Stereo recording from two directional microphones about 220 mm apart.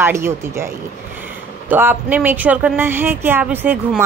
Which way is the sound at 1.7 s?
10° right (ahead or behind).